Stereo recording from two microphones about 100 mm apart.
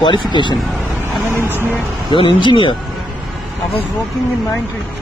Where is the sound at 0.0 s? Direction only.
50° left (ahead or behind).